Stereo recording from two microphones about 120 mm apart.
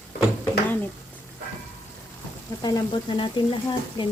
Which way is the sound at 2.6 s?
35° left (ahead or behind).